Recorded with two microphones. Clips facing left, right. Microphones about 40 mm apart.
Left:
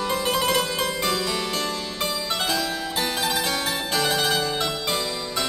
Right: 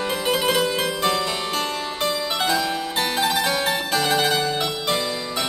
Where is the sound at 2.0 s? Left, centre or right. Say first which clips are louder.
Right 3 dB; centre.